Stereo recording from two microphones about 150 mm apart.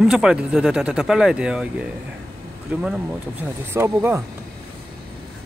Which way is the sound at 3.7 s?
15° right (ahead or behind).